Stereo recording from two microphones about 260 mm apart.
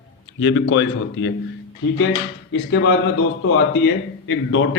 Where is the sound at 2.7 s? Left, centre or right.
Left.